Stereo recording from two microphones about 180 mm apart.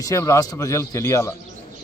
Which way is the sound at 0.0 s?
15° left (ahead or behind).